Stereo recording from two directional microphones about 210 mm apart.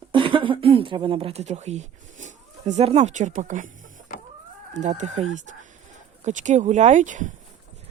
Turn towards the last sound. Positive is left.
turn(degrees=-35)  # may be behind; listen again after turning